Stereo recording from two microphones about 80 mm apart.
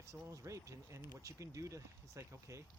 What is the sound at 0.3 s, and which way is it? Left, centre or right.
Speech, right.